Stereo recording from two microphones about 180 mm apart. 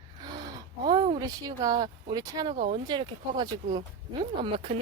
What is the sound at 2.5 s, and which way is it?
Speech, 45° right (ahead or behind).